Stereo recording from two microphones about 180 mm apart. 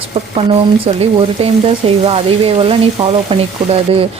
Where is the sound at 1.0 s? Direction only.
35° right (ahead or behind).